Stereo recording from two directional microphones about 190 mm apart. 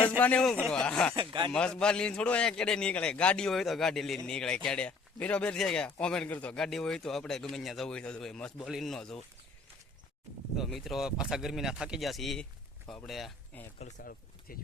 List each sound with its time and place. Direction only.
0.2 s a man's voice: 5° left (ahead or behind)
1.1 s speech: 25° right (ahead or behind)
1.5 s speech: 5° left (ahead or behind)
10.6 s speech: centre (ahead or behind)
14.0 s speech: 50° left (ahead or behind)